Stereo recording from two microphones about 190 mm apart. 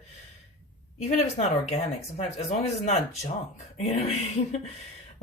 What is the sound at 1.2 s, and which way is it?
Speech, 35° left (ahead or behind).